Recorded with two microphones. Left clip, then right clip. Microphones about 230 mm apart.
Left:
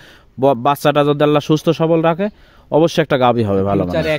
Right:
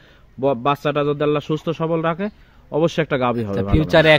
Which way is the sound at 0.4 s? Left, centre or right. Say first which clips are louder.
Left 5 dB; left.